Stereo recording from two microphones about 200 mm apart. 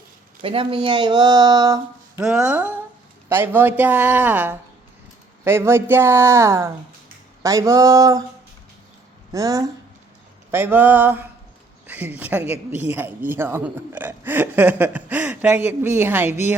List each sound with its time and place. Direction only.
0.4 s speech: 25° right (ahead or behind)
2.2 s speech: 5° right (ahead or behind)
9.3 s speech: 15° right (ahead or behind)